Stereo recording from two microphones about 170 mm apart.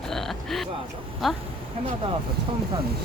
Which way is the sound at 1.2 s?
Centre (ahead or behind).